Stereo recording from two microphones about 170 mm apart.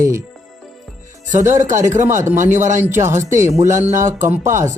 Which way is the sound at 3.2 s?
15° right (ahead or behind).